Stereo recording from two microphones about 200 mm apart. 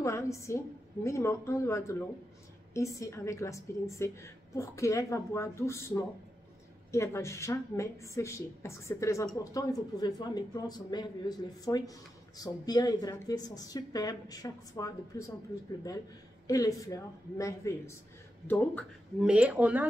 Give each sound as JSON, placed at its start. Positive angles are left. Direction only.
{"t": 0.0, "sound": "a woman's voice", "side_deg": 15}
{"t": 16.4, "sound": "speech", "side_deg": 15}
{"t": 19.2, "sound": "speech", "side_deg": -5}